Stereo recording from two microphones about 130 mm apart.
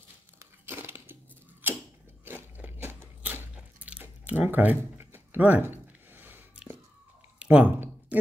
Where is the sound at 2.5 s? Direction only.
15° right (ahead or behind).